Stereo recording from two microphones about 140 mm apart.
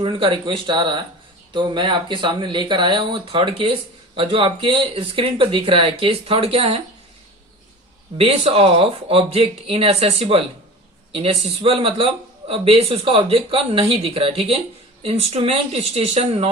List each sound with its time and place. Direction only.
0.0 s speech: 40° right (ahead or behind)
8.2 s speech: 45° right (ahead or behind)